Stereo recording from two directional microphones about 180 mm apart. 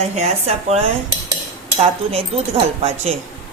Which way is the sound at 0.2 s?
35° right (ahead or behind).